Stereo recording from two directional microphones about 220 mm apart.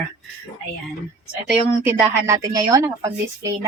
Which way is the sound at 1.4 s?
10° right (ahead or behind).